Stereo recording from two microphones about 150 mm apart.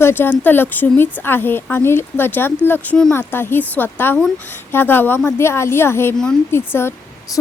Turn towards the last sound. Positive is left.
turn(degrees=25)  # may be behind; listen again after turning